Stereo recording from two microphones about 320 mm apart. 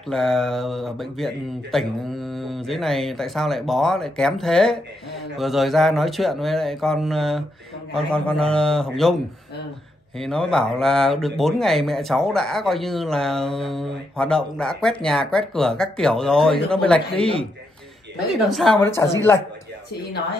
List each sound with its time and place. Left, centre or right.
0.1 s speech: centre
10.1 s speech: centre
17.1 s a man's voice: centre
18.5 s a woman's voice: centre